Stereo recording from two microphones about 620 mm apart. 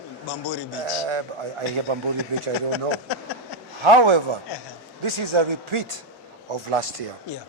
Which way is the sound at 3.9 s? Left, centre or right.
Right.